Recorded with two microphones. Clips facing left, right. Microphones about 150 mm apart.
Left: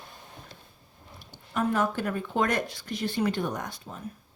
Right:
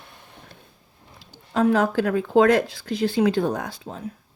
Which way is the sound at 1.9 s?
90° right.